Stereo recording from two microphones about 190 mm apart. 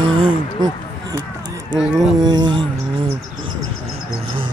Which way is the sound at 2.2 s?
20° right (ahead or behind).